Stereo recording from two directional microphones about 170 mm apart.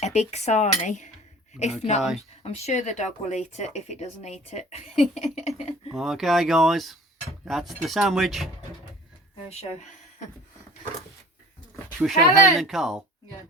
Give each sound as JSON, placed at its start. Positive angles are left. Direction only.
{"t": 0.0, "sound": "speech", "side_deg": 40}
{"t": 2.0, "sound": "speech", "side_deg": 0}
{"t": 2.4, "sound": "speech", "side_deg": 40}
{"t": 5.9, "sound": "speech", "side_deg": 0}
{"t": 11.9, "sound": "speech", "side_deg": 0}
{"t": 12.3, "sound": "speech", "side_deg": -20}
{"t": 12.5, "sound": "speech", "side_deg": 0}